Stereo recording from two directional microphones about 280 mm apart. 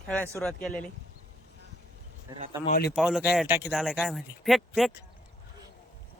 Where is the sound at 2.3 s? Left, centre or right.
Centre.